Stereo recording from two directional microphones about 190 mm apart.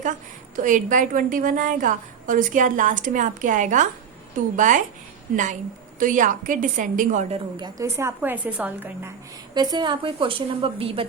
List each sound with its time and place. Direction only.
0.5 s a woman's voice: 45° right (ahead or behind)
6.0 s a woman's voice: 45° right (ahead or behind); by 9.1 s 10° right (ahead or behind)
9.6 s a woman's voice: 20° right (ahead or behind)